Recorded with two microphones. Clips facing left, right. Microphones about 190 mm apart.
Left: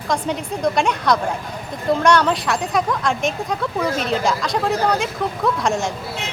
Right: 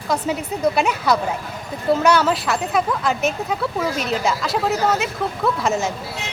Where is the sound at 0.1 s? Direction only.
5° right (ahead or behind).